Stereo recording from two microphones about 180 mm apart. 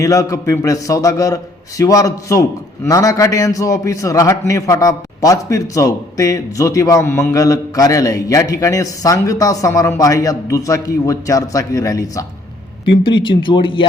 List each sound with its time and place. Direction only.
0.0 s a man's voice: 20° left (ahead or behind)